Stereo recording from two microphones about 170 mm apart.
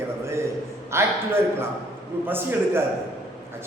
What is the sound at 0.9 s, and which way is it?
A man's voice, 15° right (ahead or behind).